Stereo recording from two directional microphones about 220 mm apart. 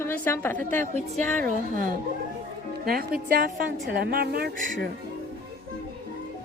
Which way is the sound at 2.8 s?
40° right (ahead or behind).